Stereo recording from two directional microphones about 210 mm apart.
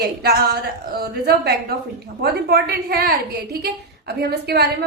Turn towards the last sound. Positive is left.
turn(degrees=-50)  # may be behind; listen again after turning